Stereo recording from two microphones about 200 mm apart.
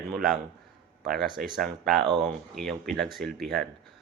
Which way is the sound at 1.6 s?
Centre (ahead or behind).